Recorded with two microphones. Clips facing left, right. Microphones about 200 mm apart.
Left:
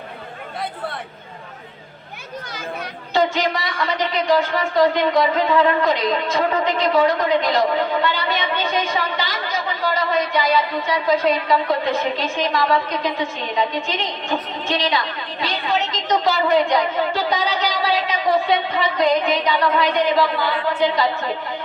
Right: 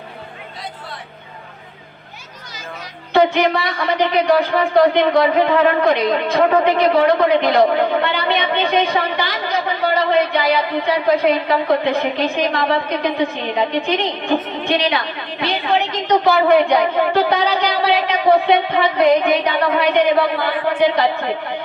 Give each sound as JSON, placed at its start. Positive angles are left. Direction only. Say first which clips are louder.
{"t": 3.1, "sound": "a woman's voice", "louder": "right 5 dB", "side_deg": -60}